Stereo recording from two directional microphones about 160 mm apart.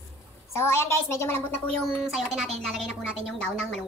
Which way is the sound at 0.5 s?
15° left (ahead or behind).